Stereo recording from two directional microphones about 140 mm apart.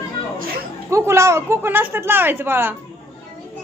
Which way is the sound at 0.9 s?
20° right (ahead or behind).